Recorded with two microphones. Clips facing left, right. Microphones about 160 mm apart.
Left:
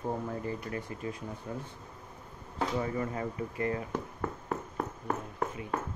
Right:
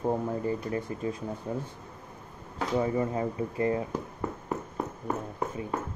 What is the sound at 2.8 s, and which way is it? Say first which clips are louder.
Speech: right 9 dB; 25° right (ahead or behind).